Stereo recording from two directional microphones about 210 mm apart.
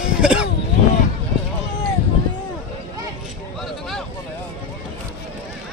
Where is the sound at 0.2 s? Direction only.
5° right (ahead or behind).